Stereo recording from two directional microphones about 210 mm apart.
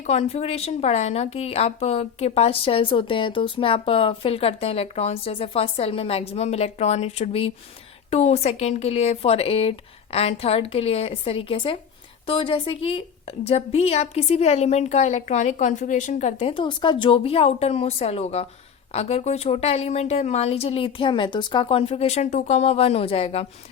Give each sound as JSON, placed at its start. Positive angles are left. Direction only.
{"t": 0.0, "sound": "speech", "side_deg": 30}